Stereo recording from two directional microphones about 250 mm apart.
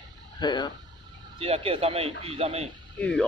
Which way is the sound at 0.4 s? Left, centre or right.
Centre.